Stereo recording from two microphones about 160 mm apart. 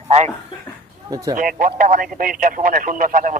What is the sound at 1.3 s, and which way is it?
Speech, 60° right (ahead or behind).